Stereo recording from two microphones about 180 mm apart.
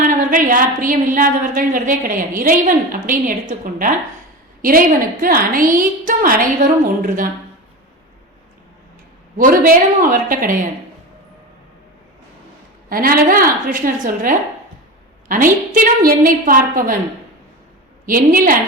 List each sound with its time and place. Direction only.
0.0 s a woman's voice: 50° right (ahead or behind)
5.2 s a woman's voice: 50° right (ahead or behind)
9.4 s a woman's voice: 50° right (ahead or behind)
12.9 s a woman's voice: 55° right (ahead or behind)
15.7 s a woman's voice: 50° right (ahead or behind)
18.0 s a woman's voice: 50° right (ahead or behind)